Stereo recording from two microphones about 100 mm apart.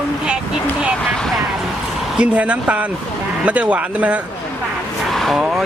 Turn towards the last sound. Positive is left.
turn(degrees=-5)  # may be behind; listen again after turning